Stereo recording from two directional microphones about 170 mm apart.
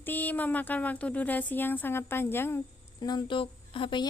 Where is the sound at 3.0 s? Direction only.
25° left (ahead or behind).